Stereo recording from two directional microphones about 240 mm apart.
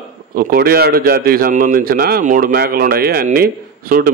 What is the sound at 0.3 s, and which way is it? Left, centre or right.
A man's voice, right.